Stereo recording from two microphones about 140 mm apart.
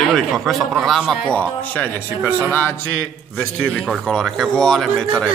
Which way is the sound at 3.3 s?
5° left (ahead or behind).